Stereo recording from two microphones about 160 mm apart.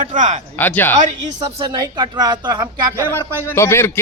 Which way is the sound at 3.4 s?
15° left (ahead or behind).